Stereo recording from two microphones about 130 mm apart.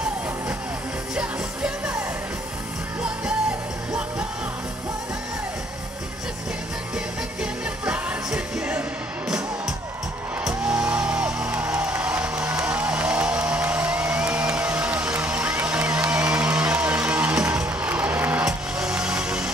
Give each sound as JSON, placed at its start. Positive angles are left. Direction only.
{"t": 1.1, "sound": "music", "side_deg": -10}
{"t": 7.8, "sound": "music", "side_deg": -10}
{"t": 10.4, "sound": "music", "side_deg": -5}